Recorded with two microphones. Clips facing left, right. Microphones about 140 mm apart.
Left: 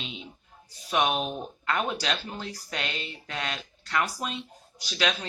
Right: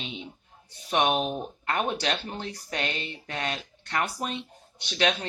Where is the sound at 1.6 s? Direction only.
45° right (ahead or behind).